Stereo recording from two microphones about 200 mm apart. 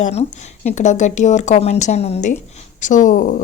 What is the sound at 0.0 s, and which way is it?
A woman's voice, 35° left (ahead or behind).